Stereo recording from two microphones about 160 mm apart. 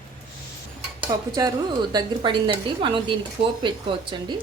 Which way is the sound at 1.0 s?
25° right (ahead or behind).